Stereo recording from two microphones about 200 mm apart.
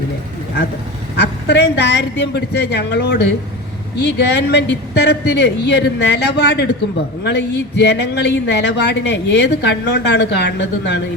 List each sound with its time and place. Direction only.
1.1 s a man's voice: 55° left (ahead or behind)